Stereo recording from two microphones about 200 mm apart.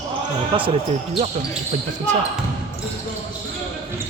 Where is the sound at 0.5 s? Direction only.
25° right (ahead or behind).